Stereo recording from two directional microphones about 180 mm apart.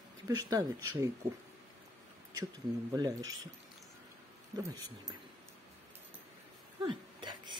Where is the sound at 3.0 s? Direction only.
20° right (ahead or behind).